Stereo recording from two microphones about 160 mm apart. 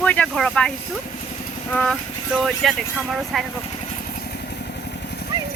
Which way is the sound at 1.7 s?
10° left (ahead or behind).